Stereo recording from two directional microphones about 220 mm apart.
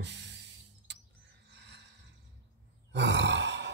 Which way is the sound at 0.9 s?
55° right (ahead or behind).